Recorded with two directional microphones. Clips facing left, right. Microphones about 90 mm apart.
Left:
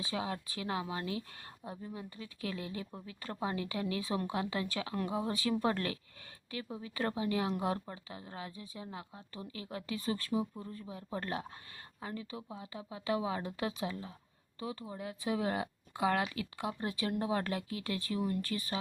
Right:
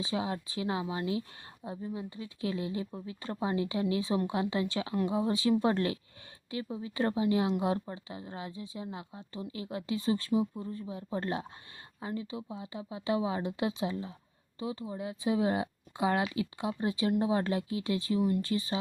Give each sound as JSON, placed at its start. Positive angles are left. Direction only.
{"t": 0.0, "sound": "speech", "side_deg": -20}